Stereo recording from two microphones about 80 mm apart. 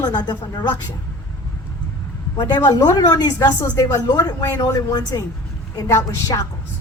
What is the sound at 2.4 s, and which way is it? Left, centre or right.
Speech, left.